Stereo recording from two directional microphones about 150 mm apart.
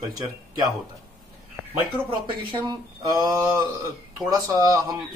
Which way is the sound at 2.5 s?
25° right (ahead or behind).